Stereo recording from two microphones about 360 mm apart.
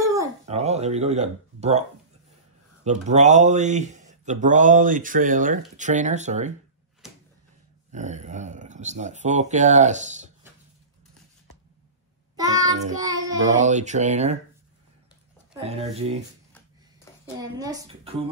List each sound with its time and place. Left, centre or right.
0.0 s speech: centre
7.9 s speech: centre
12.4 s child singing: centre
13.7 s speech: centre
15.6 s a woman's voice: centre
17.4 s a woman's voice: centre